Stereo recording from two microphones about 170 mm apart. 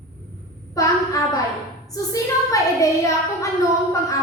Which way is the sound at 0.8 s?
20° left (ahead or behind).